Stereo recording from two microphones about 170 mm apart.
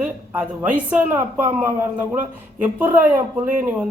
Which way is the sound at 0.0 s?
10° right (ahead or behind).